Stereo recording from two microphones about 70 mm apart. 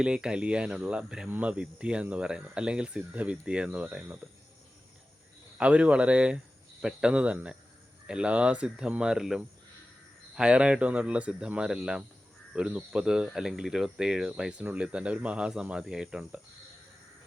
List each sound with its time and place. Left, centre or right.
0.0 s speech: centre
5.5 s speech: centre